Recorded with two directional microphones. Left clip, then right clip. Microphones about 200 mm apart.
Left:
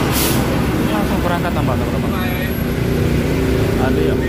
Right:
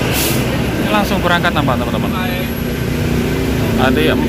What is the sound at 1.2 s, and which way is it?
Speech, 10° right (ahead or behind).